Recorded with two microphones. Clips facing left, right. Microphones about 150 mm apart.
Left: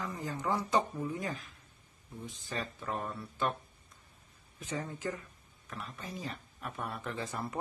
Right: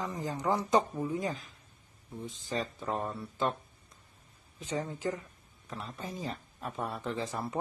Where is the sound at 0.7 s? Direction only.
20° right (ahead or behind).